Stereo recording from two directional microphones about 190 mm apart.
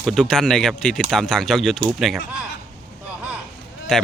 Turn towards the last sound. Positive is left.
turn(degrees=5)  # may be behind; listen again after turning